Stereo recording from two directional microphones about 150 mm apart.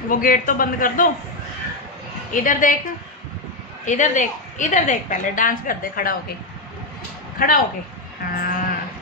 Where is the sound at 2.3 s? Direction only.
60° left (ahead or behind).